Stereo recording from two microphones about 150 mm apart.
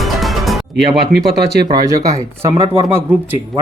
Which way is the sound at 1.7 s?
25° right (ahead or behind).